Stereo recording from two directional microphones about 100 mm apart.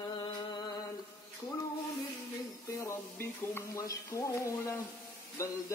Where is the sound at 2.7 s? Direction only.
30° left (ahead or behind).